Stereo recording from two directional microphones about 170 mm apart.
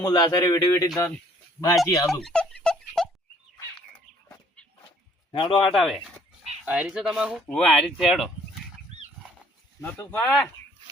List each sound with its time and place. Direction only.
0.0 s a man's voice: 20° left (ahead or behind)
1.7 s speech: centre (ahead or behind)
2.6 s a sound: centre (ahead or behind)
5.3 s a man's voice: 30° left (ahead or behind)
5.7 s speech: centre (ahead or behind)
9.8 s speech: 10° left (ahead or behind)